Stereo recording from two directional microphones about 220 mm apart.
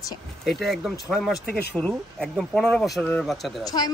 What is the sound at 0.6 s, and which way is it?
Speech, centre (ahead or behind).